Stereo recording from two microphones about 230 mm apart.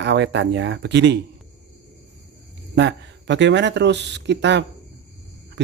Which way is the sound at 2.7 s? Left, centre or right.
Right.